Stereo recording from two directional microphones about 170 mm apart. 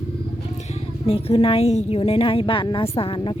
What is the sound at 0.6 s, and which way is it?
A woman's voice, 35° left (ahead or behind).